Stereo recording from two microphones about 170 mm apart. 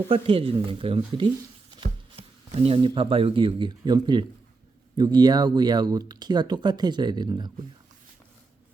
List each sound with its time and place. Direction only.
0.1 s speech: 35° right (ahead or behind)